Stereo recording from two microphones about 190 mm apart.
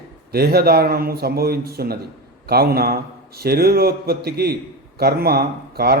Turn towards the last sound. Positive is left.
turn(degrees=-55)  # may be behind; listen again after turning